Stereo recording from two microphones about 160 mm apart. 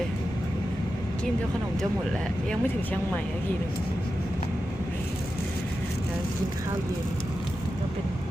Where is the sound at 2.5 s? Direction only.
10° left (ahead or behind).